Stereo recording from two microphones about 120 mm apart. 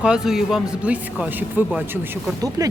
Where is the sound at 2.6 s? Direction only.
25° right (ahead or behind).